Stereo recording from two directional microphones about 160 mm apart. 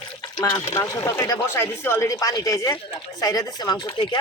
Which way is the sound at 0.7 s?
20° left (ahead or behind).